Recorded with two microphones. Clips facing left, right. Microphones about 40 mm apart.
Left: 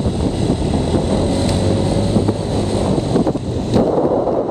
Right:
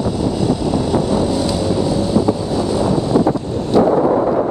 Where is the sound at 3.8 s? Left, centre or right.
Right.